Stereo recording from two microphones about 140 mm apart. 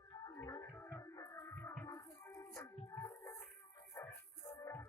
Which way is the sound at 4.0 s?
15° left (ahead or behind).